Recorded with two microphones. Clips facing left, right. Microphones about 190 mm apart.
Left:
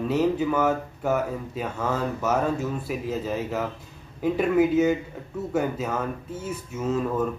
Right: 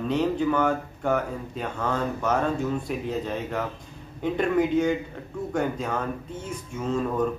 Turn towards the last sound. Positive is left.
turn(degrees=5)  # may be behind; listen again after turning